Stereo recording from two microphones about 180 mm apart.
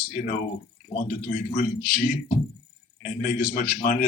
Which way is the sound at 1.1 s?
50° left (ahead or behind).